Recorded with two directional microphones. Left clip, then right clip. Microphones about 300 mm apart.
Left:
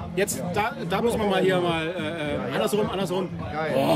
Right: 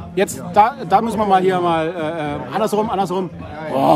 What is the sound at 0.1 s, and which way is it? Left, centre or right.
A man's voice, right.